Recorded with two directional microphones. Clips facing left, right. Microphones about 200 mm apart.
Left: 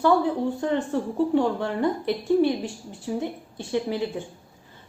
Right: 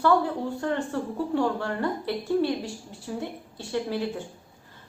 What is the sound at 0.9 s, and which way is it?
A woman's voice, 15° left (ahead or behind).